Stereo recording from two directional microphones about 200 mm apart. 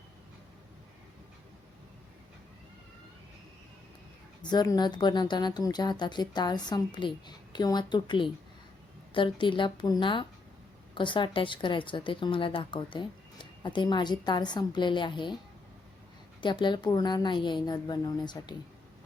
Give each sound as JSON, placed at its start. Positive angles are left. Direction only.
{"t": 4.4, "sound": "speech", "side_deg": 20}
{"t": 16.4, "sound": "speech", "side_deg": 25}